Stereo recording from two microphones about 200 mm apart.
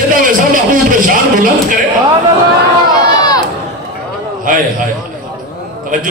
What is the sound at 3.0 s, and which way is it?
Run, 20° left (ahead or behind).